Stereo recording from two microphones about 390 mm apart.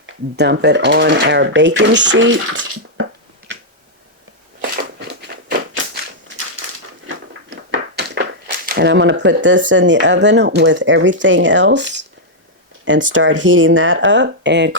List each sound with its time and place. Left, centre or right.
0.0 s speech: right
3.0 s finger snapping: right
4.9 s a sound: right
7.7 s speech: right